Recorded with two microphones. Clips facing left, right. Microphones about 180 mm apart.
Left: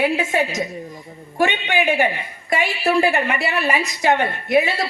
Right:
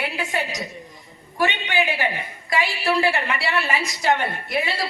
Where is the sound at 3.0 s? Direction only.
20° left (ahead or behind).